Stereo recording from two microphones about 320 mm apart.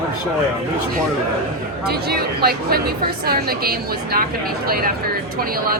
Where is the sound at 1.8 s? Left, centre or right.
Right.